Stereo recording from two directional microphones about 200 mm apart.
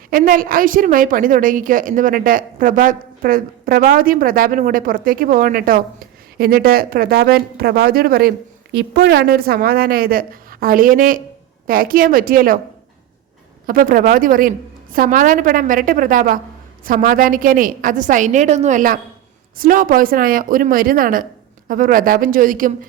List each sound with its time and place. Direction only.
0.1 s a woman's voice: 45° right (ahead or behind)
13.7 s a woman's voice: 45° right (ahead or behind)